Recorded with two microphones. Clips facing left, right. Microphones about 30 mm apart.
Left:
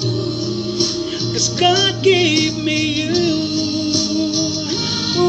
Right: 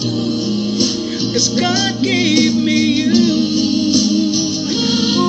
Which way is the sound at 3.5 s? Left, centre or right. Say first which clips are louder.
Right 4 dB; right.